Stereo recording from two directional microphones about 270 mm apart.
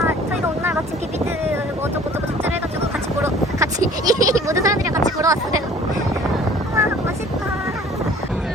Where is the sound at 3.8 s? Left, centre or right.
Right.